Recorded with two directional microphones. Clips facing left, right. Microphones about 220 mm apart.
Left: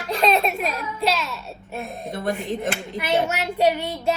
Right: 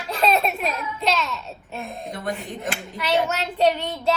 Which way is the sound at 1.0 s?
10° left (ahead or behind).